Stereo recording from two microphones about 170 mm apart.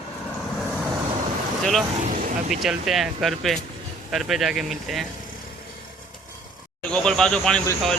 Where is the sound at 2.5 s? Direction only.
Centre (ahead or behind).